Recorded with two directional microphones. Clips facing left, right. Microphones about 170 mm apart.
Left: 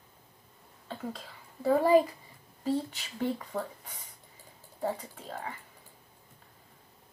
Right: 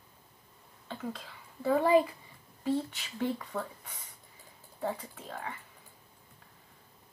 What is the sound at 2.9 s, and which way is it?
Speech, 35° left (ahead or behind).